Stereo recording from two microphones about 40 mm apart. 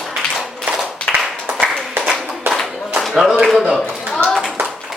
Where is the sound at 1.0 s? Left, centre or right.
Left.